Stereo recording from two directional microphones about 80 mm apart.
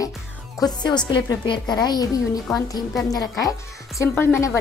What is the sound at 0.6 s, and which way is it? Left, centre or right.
A woman's voice, left.